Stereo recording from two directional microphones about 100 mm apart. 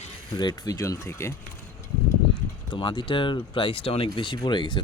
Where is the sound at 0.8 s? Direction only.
30° left (ahead or behind).